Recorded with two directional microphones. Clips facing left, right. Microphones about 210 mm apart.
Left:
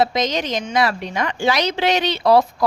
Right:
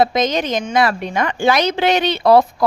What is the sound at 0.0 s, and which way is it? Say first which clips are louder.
A woman's voice: right 3 dB; 50° right (ahead or behind).